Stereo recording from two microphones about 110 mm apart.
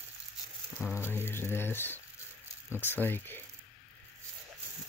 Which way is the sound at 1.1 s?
20° left (ahead or behind).